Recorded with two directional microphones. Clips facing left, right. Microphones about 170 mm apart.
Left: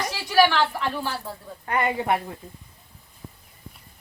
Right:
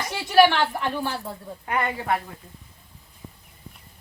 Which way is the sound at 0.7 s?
20° right (ahead or behind).